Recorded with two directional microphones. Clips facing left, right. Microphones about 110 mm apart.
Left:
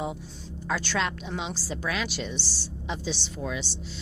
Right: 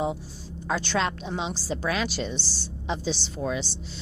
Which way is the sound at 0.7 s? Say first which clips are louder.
Right 2 dB; 25° right (ahead or behind).